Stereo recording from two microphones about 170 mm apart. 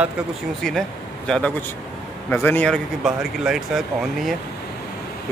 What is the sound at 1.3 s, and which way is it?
A man's voice, 5° left (ahead or behind).